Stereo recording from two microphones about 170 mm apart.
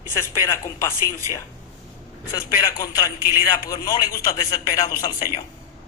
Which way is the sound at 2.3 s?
20° left (ahead or behind).